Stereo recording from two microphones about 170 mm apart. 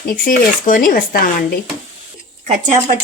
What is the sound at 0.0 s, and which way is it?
Speech, 55° left (ahead or behind).